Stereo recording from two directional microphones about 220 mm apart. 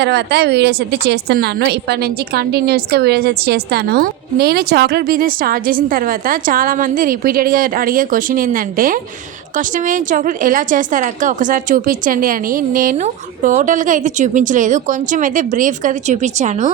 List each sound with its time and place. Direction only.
0.0 s a woman's voice: 50° right (ahead or behind); by 16.6 s 35° right (ahead or behind)